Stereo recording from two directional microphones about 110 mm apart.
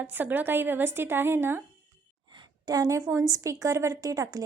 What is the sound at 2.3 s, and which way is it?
A woman's voice, 35° right (ahead or behind).